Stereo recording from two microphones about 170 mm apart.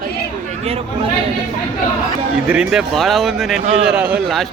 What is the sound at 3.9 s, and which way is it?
Speech, 5° right (ahead or behind).